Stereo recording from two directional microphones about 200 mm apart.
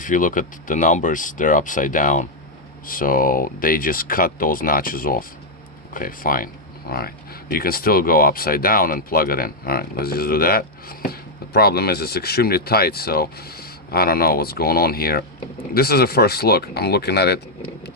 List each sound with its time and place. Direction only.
0.0 s speech: 40° left (ahead or behind)